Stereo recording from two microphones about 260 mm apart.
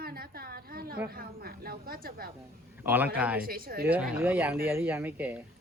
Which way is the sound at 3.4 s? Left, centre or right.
Right.